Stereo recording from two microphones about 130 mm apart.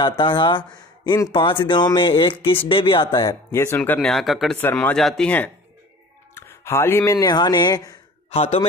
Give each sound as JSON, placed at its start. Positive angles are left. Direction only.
{"t": 0.2, "sound": "speech", "side_deg": 40}
{"t": 3.3, "sound": "speech", "side_deg": 20}
{"t": 4.0, "sound": "speech", "side_deg": 0}
{"t": 6.3, "sound": "speech", "side_deg": 20}
{"t": 8.3, "sound": "a man's voice", "side_deg": 50}